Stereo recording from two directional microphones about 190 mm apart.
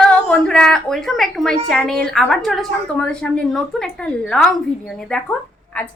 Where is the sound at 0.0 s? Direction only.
5° left (ahead or behind).